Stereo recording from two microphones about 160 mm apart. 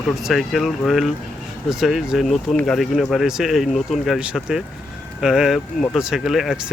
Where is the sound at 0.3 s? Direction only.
Centre (ahead or behind).